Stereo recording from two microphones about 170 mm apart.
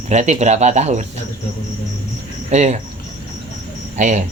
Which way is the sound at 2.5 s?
45° right (ahead or behind).